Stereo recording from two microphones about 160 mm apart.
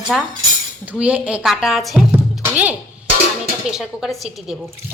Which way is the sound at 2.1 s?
10° right (ahead or behind).